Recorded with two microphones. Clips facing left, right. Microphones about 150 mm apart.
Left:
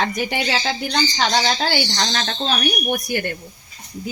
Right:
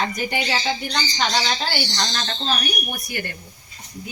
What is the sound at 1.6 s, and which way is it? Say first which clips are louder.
Speech: left 4 dB; 70° left (ahead or behind).